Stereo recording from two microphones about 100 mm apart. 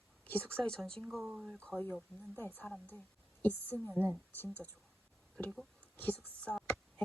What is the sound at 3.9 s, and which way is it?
Speech, 10° right (ahead or behind).